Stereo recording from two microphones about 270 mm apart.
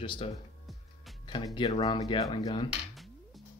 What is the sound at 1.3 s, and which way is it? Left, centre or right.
Speech, centre.